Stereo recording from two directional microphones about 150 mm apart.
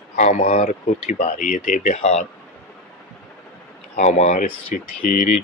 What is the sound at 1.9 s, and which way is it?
Speech, 45° left (ahead or behind).